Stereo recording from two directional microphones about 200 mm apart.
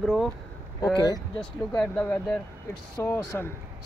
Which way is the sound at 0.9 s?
20° left (ahead or behind).